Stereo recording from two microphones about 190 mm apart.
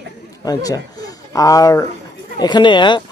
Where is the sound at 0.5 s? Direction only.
20° left (ahead or behind).